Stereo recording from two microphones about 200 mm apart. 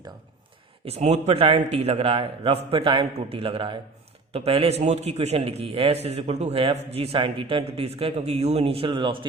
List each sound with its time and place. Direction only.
0.9 s a man's voice: 35° right (ahead or behind)